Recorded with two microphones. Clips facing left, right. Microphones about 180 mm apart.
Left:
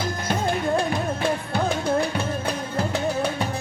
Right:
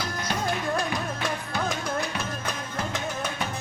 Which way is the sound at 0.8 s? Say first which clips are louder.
Left 5 dB; 30° left (ahead or behind).